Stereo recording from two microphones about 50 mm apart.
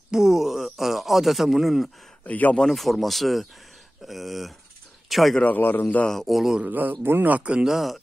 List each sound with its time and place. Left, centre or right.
0.1 s a sound: centre
2.2 s speech: left
2.7 s speech: centre
5.4 s a man's voice: left
6.0 s speech: centre
6.6 s speech: right
7.0 s speech: right
7.2 s speech: right
7.6 s speech: centre